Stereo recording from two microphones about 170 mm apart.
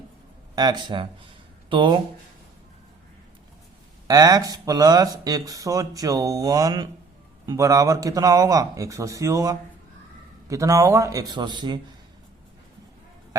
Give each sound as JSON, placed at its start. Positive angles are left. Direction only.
{"t": 0.5, "sound": "speech", "side_deg": -25}
{"t": 4.0, "sound": "speech", "side_deg": -20}